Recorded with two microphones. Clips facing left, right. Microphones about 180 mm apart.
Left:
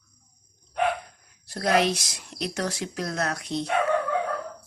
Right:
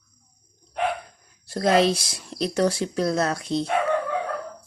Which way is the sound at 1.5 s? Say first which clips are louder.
Right 4 dB; 30° right (ahead or behind).